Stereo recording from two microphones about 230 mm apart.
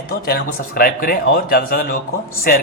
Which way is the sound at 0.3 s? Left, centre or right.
Left.